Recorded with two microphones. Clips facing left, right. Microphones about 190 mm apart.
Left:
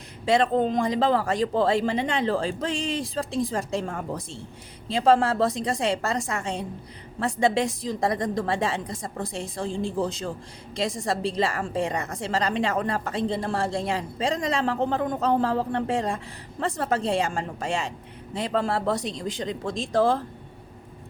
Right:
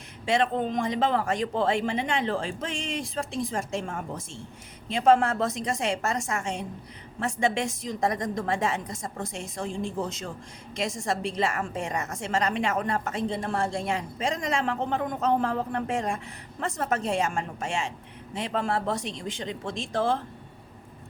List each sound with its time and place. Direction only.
0.3 s a woman's voice: 35° left (ahead or behind)